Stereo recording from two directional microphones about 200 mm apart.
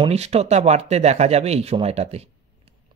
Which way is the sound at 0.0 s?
30° right (ahead or behind).